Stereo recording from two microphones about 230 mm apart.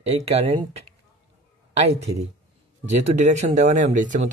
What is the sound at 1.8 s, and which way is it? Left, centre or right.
Speech, right.